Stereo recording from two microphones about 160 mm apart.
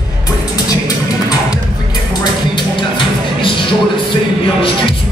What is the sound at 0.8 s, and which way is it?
Music, 25° left (ahead or behind).